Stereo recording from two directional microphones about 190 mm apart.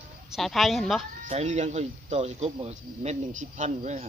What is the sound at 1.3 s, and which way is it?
Speech, 35° right (ahead or behind).